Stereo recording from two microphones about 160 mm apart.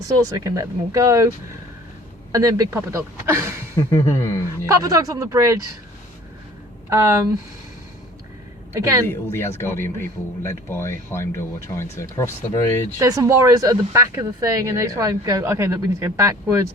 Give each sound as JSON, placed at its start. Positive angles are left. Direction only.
{"t": 0.3, "sound": "speech", "side_deg": -20}
{"t": 2.3, "sound": "a man's voice", "side_deg": -20}
{"t": 3.8, "sound": "a sound", "side_deg": 20}
{"t": 4.6, "sound": "speech", "side_deg": -20}
{"t": 6.9, "sound": "speech", "side_deg": -20}
{"t": 9.0, "sound": "speech", "side_deg": 15}
{"t": 13.0, "sound": "speech", "side_deg": -20}